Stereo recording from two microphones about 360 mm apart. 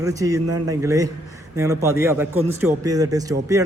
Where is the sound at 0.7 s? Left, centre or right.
Centre.